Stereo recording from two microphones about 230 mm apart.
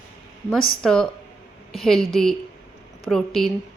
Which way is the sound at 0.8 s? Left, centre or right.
Centre.